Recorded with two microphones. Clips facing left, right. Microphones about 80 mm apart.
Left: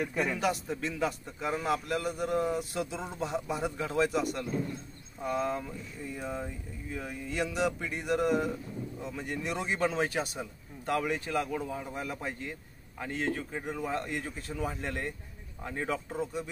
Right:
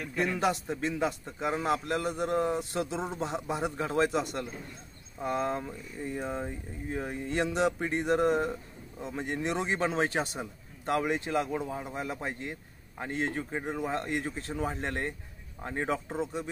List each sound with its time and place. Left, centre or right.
0.0 s a man's voice: centre
0.4 s a man's voice: right
6.0 s a man's voice: right